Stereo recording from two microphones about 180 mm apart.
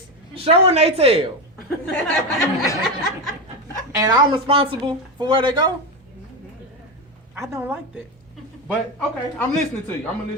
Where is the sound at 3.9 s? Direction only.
20° right (ahead or behind).